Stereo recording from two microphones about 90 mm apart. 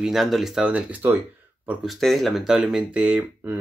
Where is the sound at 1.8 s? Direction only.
Centre (ahead or behind).